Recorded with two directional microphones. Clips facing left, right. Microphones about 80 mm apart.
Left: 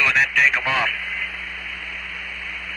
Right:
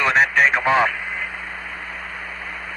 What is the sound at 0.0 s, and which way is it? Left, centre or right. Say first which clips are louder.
Radio: right 3 dB; right.